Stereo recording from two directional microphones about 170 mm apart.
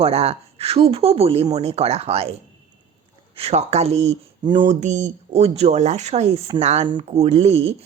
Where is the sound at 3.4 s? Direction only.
40° right (ahead or behind).